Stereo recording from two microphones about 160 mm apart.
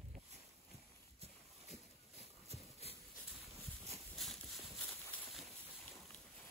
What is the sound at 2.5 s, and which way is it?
Horse, 40° right (ahead or behind).